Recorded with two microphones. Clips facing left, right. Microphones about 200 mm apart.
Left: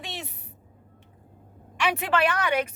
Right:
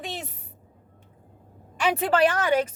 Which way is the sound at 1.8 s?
35° right (ahead or behind).